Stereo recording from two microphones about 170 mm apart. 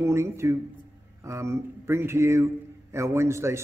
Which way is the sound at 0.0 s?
15° right (ahead or behind).